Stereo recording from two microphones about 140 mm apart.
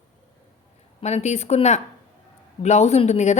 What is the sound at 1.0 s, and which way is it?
A woman's voice, 55° left (ahead or behind).